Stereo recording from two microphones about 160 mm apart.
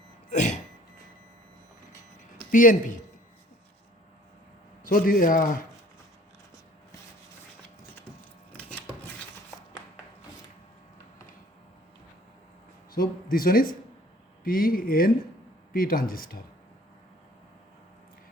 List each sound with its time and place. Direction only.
0.3 s a sound: 50° left (ahead or behind)
2.5 s speech: 55° left (ahead or behind)
4.9 s speech: 65° left (ahead or behind)
12.9 s speech: 65° left (ahead or behind)